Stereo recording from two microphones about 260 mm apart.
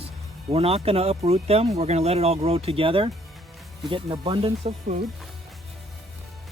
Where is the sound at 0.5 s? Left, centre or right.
Right.